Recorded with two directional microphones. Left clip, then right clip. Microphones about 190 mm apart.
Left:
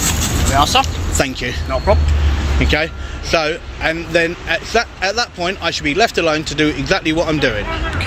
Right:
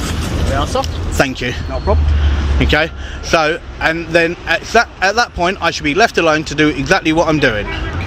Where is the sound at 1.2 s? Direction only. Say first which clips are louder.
Right 3 dB; 20° right (ahead or behind).